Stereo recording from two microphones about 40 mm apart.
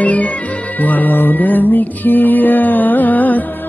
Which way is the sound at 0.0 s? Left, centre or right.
Left.